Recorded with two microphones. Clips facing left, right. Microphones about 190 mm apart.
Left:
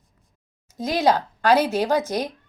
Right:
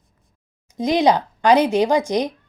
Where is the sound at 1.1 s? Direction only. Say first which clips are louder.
Right 3 dB; 15° right (ahead or behind).